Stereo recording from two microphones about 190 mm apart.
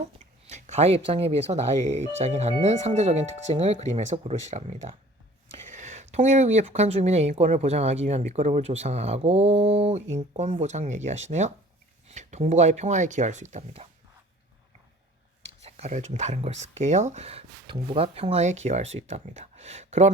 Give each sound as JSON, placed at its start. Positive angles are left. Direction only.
{"t": 0.4, "sound": "speech", "side_deg": -35}
{"t": 15.6, "sound": "speech", "side_deg": -35}